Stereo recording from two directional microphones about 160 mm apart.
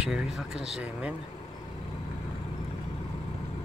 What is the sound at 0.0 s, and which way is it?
Speech, 5° right (ahead or behind).